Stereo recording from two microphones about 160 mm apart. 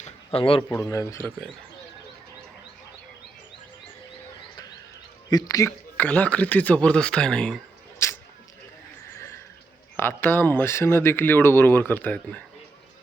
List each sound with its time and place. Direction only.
0.3 s a man's voice: 35° left (ahead or behind)
0.7 s speech: 15° left (ahead or behind)
5.3 s speech: 20° left (ahead or behind)
6.0 s speech: 10° left (ahead or behind)
9.1 s a sound: 15° left (ahead or behind)
10.0 s speech: 10° left (ahead or behind)